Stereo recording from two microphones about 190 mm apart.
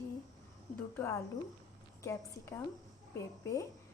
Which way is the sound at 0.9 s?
15° left (ahead or behind).